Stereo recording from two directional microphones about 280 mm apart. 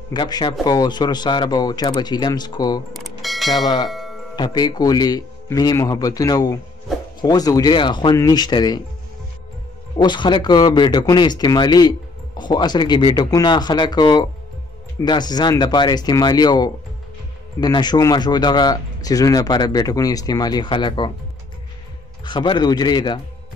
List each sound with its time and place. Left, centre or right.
0.1 s speech: centre
3.0 s a sound: centre
3.5 s speech: centre
3.9 s music: centre
4.4 s speech: centre
9.9 s speech: centre
22.2 s speech: centre